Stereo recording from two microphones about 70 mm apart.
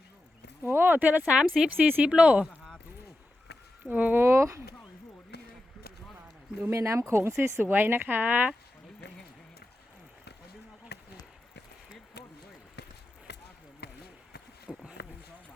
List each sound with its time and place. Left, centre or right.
0.6 s speech: right
1.3 s a woman's voice: centre
3.8 s speech: right
4.2 s speech: right
6.7 s speech: right
14.7 s a sound: centre